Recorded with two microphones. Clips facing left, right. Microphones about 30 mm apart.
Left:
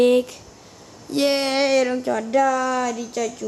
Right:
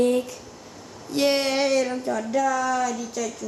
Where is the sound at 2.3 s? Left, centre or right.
Left.